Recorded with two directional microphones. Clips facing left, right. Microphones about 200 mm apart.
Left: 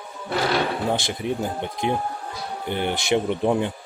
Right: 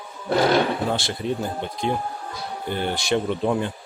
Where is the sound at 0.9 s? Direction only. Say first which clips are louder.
Even; 15° left (ahead or behind).